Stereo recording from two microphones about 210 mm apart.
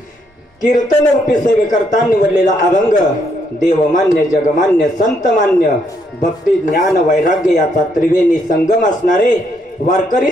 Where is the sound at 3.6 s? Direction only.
40° left (ahead or behind).